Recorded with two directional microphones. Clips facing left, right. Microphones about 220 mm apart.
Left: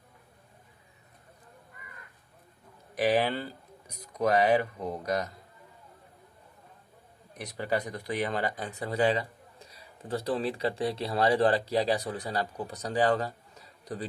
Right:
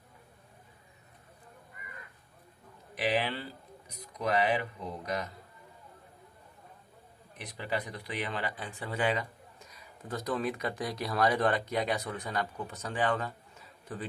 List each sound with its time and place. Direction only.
2.9 s speech: 45° left (ahead or behind)
7.3 s speech: 40° left (ahead or behind)